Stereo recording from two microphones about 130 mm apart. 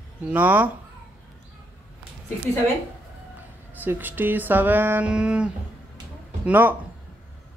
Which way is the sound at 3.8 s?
15° right (ahead or behind).